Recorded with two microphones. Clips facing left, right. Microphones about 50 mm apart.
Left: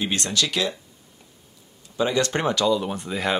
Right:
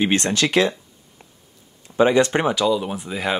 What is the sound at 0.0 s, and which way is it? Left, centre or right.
Speech, right.